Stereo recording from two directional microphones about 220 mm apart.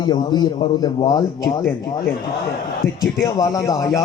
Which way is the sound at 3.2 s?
15° left (ahead or behind).